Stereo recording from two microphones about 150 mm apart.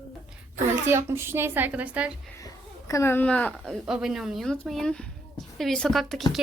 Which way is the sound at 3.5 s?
5° right (ahead or behind).